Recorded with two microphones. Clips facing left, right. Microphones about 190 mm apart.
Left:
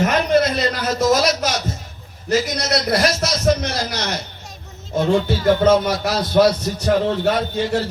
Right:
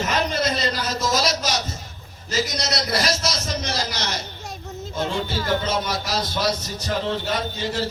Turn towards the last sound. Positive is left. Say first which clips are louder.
# left 6 dB
turn(degrees=60)  # may be behind; listen again after turning